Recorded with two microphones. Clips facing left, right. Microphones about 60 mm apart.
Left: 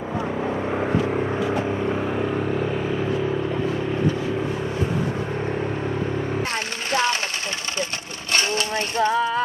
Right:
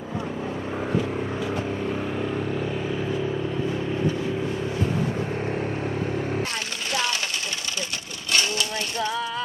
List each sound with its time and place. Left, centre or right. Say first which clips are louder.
0.4 s vehicle: left 5 dB; left
2.2 s vehicle: left 3 dB; centre
5.5 s vehicle: left 2 dB; left
6.9 s sewing machine: left 5 dB; left
8.3 s a sound: left 2 dB; left